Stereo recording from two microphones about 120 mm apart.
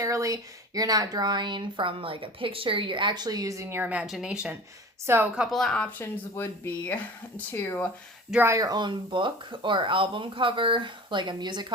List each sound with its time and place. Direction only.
0.0 s speech: 25° right (ahead or behind); by 4.5 s 10° right (ahead or behind)
5.0 s a woman's voice: 20° right (ahead or behind)
5.4 s speech: centre (ahead or behind)
6.0 s speech: 20° left (ahead or behind)
8.4 s speech: 25° right (ahead or behind)